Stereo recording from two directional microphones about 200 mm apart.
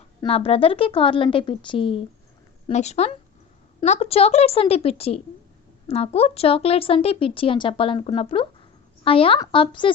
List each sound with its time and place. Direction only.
0.2 s a woman's voice: 30° left (ahead or behind)